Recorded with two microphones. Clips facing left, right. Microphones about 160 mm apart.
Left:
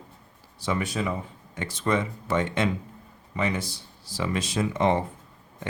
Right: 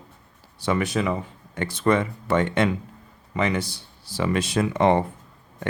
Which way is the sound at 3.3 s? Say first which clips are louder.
Right 4 dB; 75° right (ahead or behind).